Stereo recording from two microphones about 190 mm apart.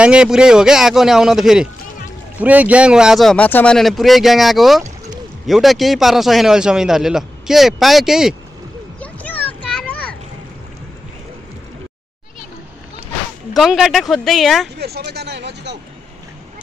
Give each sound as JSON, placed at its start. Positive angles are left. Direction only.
{"t": 0.0, "sound": "speech", "side_deg": -5}
{"t": 9.0, "sound": "a sound", "side_deg": 10}
{"t": 13.6, "sound": "speech", "side_deg": 0}
{"t": 14.8, "sound": "speech", "side_deg": -60}